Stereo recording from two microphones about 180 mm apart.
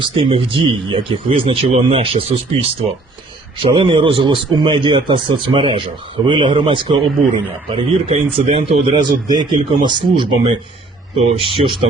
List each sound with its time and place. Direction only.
0.0 s a man's voice: 30° right (ahead or behind)